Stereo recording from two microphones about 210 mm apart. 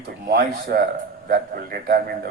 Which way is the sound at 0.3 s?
45° right (ahead or behind).